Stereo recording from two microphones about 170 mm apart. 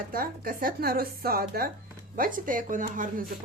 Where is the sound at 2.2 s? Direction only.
50° right (ahead or behind).